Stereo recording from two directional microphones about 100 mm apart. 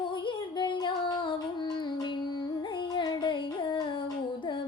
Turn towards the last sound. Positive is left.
turn(degrees=45)  # may be behind; listen again after turning